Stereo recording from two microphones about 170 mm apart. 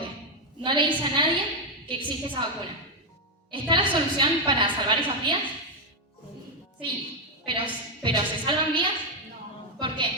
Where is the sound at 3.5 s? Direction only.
30° right (ahead or behind).